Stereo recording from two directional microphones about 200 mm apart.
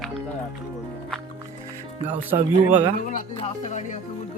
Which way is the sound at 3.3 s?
35° left (ahead or behind).